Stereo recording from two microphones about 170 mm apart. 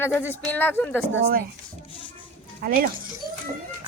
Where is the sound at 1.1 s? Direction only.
60° right (ahead or behind).